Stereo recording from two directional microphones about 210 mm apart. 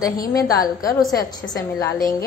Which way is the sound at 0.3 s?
15° left (ahead or behind).